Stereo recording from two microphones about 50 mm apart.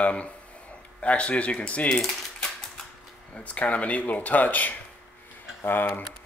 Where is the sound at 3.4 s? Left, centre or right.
Left.